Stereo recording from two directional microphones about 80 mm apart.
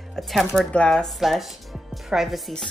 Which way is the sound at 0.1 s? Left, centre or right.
Centre.